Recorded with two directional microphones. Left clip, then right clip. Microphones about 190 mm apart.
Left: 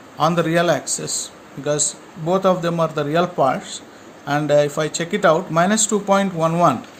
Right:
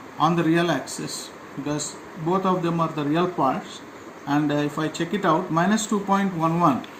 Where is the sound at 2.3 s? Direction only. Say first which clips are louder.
Left 6 dB; 60° left (ahead or behind).